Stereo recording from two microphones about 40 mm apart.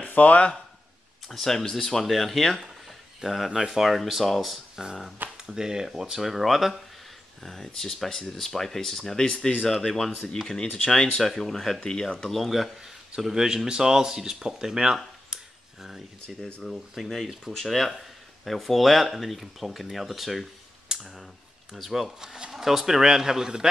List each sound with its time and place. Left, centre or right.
0.0 s speech: left
1.3 s speech: centre
3.2 s speech: centre
4.8 s speech: centre
7.4 s speech: centre
12.3 s speech: centre
12.8 s speech: centre
15.2 s a sound: centre
16.6 s speech: centre
22.2 s speech: centre